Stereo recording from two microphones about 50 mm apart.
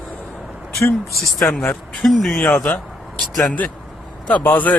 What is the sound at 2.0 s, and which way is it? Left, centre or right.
Speech, centre.